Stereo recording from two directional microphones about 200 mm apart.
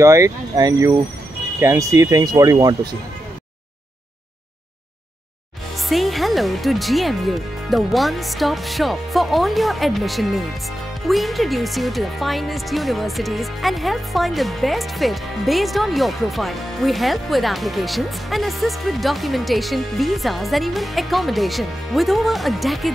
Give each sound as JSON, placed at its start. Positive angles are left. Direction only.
{"t": 0.0, "sound": "speech", "side_deg": -15}
{"t": 5.9, "sound": "speech", "side_deg": 0}